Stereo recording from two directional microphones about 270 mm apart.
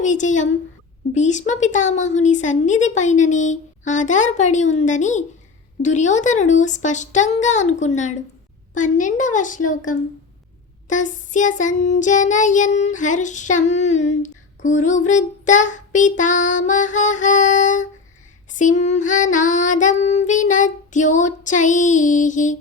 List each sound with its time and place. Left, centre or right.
0.0 s child singing: left